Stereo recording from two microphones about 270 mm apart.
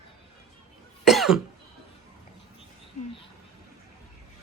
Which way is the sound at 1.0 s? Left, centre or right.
Centre.